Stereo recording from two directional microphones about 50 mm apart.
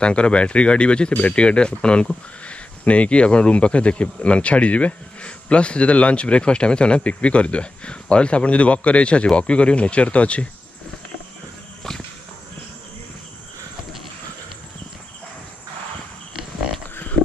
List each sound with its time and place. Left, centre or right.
0.0 s speech: left